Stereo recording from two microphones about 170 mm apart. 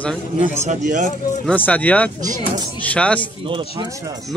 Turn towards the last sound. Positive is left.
turn(degrees=-30)  # may be behind; listen again after turning